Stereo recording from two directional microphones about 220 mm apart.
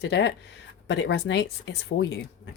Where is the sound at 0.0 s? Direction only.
50° left (ahead or behind).